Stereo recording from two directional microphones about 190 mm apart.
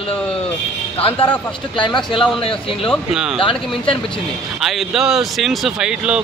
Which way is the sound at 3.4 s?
25° left (ahead or behind).